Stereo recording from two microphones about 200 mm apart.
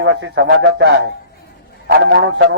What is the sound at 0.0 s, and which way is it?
A man's voice, 60° right (ahead or behind).